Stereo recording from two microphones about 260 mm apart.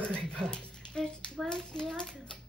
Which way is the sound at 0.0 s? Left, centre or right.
Centre.